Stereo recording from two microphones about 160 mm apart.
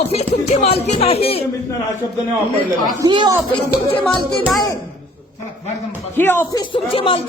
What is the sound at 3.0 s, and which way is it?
Speech, 25° right (ahead or behind).